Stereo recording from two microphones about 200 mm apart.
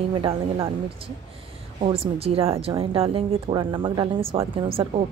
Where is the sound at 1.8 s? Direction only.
30° right (ahead or behind).